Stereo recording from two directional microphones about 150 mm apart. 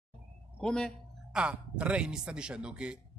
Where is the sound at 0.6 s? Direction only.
5° left (ahead or behind).